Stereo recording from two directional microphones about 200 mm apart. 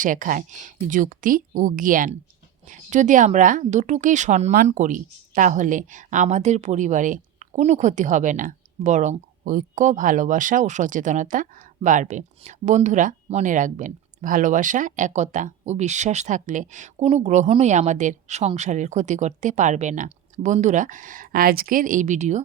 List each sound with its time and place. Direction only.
0.0 s speech: 40° right (ahead or behind)